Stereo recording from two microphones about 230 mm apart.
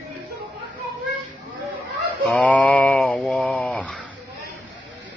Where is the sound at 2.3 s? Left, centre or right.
Centre.